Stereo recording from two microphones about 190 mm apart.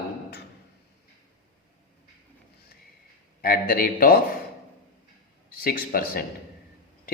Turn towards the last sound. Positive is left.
turn(degrees=50)  # may be behind; listen again after turning